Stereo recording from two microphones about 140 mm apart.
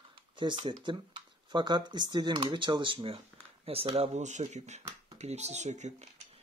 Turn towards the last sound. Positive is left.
turn(degrees=-55)  # may be behind; listen again after turning